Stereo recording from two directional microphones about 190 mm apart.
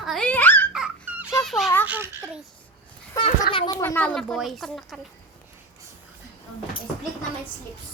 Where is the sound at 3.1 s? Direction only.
15° left (ahead or behind).